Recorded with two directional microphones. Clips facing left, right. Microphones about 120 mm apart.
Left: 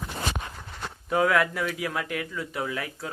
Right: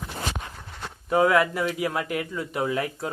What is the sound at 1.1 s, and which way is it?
Speech, 20° right (ahead or behind).